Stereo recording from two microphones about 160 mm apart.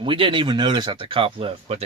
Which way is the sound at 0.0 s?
30° right (ahead or behind).